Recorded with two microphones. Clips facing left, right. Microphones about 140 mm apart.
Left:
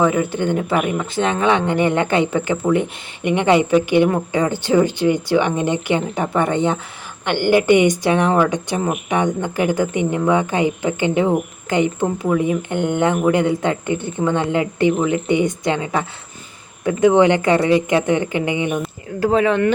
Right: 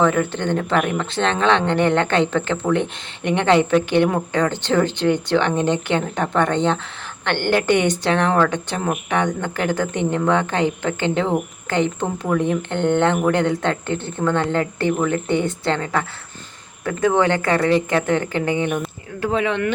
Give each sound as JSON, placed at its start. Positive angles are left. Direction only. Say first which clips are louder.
{"t": 0.0, "sound": "speech", "louder": "left 1 dB", "side_deg": 10}
{"t": 19.2, "sound": "speech", "louder": "left 5 dB", "side_deg": 40}